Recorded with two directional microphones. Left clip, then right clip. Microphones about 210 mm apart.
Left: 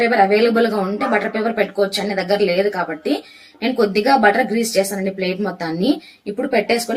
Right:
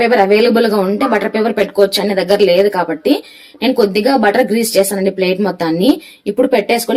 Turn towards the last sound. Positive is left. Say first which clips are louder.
# right 5 dB
turn(degrees=-40)  # may be behind; listen again after turning